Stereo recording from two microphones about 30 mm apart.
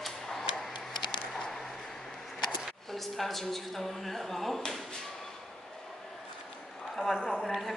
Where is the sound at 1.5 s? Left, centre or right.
Centre.